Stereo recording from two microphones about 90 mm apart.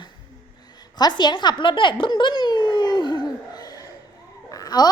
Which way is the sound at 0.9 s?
50° left (ahead or behind).